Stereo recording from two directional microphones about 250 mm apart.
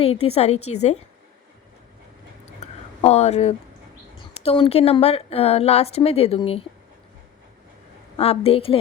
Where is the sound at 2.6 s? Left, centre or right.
Left.